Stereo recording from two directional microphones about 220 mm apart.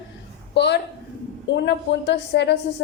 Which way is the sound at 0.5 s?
50° left (ahead or behind).